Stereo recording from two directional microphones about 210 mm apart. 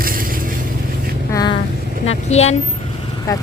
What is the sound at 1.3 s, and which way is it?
Vehicle, 20° left (ahead or behind).